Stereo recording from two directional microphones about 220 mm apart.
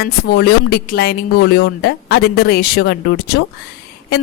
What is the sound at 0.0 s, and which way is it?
Speech, 45° left (ahead or behind).